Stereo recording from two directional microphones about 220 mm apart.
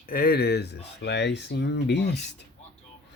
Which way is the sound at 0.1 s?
45° left (ahead or behind).